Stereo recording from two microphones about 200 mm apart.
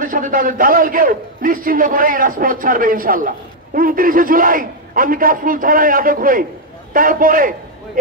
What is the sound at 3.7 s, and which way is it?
A man's voice, 45° right (ahead or behind).